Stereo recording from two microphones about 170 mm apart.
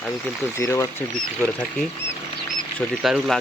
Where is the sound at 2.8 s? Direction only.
Centre (ahead or behind).